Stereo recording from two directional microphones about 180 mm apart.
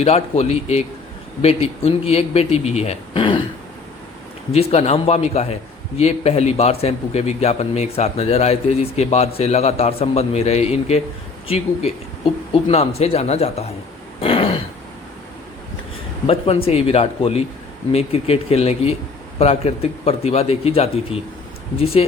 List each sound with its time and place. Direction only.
0.0 s a man's voice: 35° left (ahead or behind)
4.7 s a man's voice: 35° left (ahead or behind)
14.2 s throat clearing: 30° left (ahead or behind)
16.2 s a man's voice: 35° left (ahead or behind)